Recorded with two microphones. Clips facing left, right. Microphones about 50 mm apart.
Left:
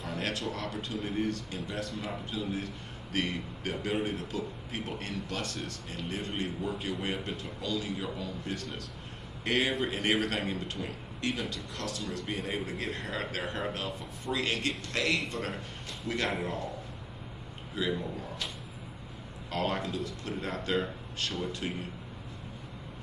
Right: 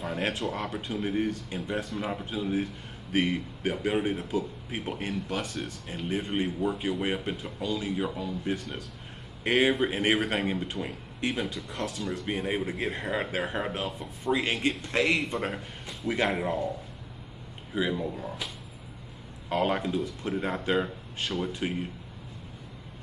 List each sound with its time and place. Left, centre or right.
0.1 s a man's voice: right
15.1 s speech: centre
17.8 s a man's voice: centre
19.5 s a man's voice: centre